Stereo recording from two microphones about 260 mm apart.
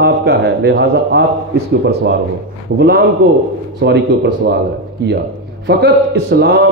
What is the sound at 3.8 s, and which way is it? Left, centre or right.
Speech, right.